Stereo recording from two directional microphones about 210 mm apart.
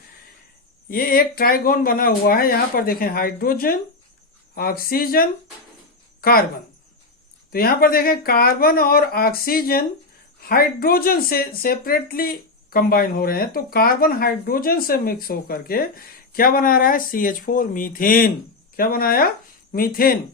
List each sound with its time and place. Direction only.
0.9 s speech: 45° left (ahead or behind)
7.5 s speech: 45° left (ahead or behind)